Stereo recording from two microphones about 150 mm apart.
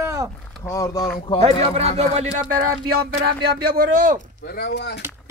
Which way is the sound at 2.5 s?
65° right (ahead or behind).